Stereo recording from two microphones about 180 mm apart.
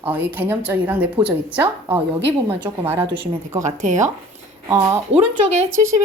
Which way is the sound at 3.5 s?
45° right (ahead or behind).